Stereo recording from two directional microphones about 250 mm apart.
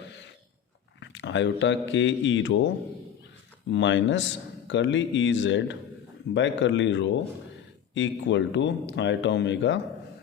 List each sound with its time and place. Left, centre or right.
0.9 s speech: left
3.7 s a man's voice: left